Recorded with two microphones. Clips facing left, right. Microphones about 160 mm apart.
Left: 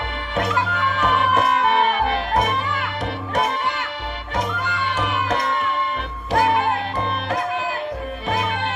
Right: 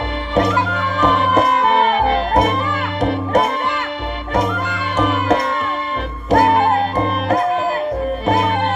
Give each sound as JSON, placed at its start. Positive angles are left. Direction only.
{"t": 0.3, "sound": "music", "side_deg": -35}